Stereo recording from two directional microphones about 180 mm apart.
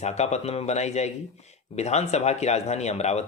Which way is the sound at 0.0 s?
40° left (ahead or behind).